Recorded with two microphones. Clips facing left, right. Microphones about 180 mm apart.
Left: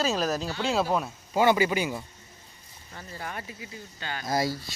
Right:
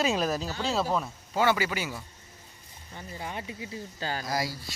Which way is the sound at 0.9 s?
10° left (ahead or behind).